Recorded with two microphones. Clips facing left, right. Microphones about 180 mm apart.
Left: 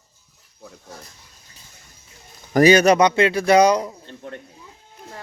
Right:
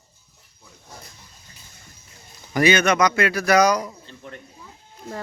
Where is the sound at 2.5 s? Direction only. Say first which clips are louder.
Left 5 dB; 40° left (ahead or behind).